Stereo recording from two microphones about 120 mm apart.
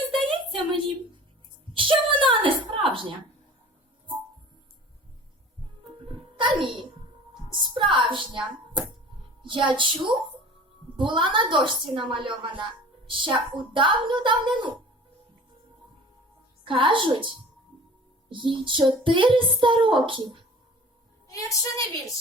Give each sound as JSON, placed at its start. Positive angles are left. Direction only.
{"t": 0.1, "sound": "a sound", "side_deg": -45}
{"t": 6.4, "sound": "a sound", "side_deg": -40}
{"t": 7.5, "sound": "hands", "side_deg": -40}
{"t": 9.4, "sound": "a woman's voice", "side_deg": -45}
{"t": 16.6, "sound": "a woman's voice", "side_deg": -45}
{"t": 21.2, "sound": "a woman's voice", "side_deg": 30}